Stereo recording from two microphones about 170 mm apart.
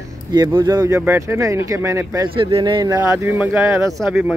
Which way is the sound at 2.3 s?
30° right (ahead or behind).